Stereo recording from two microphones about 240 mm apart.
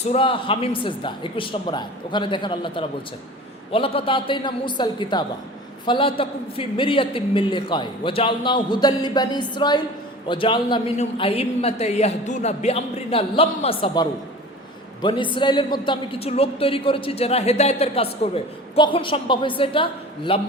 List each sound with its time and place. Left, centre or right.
0.0 s a woman's voice: left